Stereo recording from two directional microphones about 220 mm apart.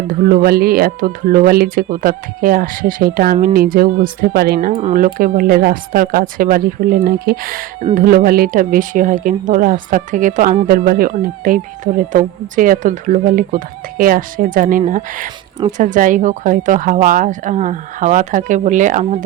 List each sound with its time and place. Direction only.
0.1 s speech: 40° right (ahead or behind)
4.7 s speech: 30° right (ahead or behind)
4.9 s speech: 40° right (ahead or behind)